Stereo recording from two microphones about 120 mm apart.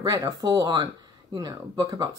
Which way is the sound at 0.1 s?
25° right (ahead or behind).